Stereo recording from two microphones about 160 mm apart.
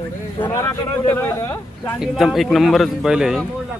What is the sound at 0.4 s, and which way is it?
Speech, 20° left (ahead or behind).